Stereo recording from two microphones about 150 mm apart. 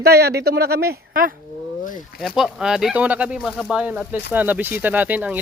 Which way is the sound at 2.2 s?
Centre (ahead or behind).